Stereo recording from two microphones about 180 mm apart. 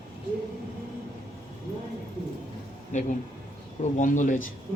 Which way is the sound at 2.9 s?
45° left (ahead or behind).